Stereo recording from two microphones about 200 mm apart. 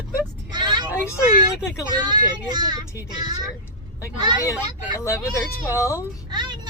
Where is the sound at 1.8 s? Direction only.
20° right (ahead or behind).